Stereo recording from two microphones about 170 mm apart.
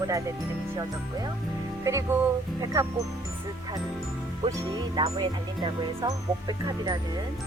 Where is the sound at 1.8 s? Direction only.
20° right (ahead or behind).